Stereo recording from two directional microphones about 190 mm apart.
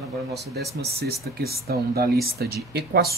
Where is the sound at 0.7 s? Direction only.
55° right (ahead or behind).